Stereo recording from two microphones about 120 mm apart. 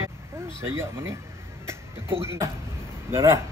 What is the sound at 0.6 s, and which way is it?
Speech, 20° right (ahead or behind).